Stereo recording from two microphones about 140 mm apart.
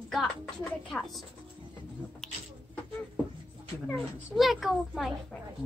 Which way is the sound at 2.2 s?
5° left (ahead or behind).